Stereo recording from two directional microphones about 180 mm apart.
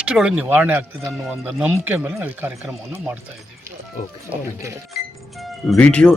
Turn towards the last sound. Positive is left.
turn(degrees=5)  # may be behind; listen again after turning